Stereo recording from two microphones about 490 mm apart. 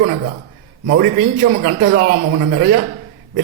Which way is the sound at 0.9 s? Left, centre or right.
Centre.